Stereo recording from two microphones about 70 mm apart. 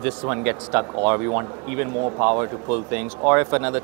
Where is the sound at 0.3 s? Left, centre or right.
Right.